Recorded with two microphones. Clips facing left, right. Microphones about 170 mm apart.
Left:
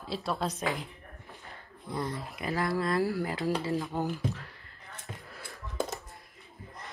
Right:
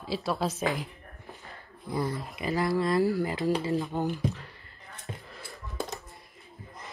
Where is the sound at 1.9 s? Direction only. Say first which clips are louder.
Right 3 dB; 5° right (ahead or behind).